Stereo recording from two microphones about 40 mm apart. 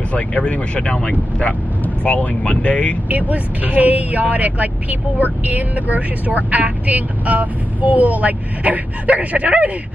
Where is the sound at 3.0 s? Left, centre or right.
Right.